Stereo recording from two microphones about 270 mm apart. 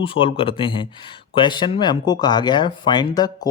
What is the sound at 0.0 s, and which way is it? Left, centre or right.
Speech, centre.